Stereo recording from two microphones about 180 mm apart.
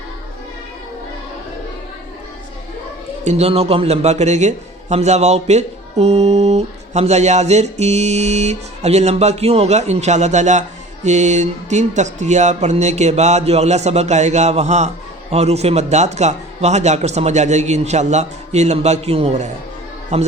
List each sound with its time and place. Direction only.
3.2 s a man's voice: 35° right (ahead or behind)